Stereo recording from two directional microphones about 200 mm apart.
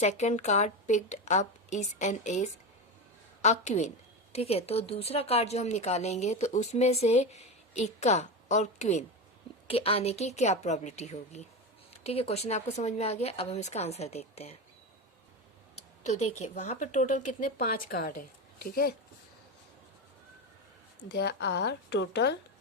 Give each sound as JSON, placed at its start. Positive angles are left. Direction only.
{"t": 0.0, "sound": "a woman's voice", "side_deg": 35}
{"t": 16.0, "sound": "a woman's voice", "side_deg": 35}
{"t": 21.1, "sound": "speech", "side_deg": 55}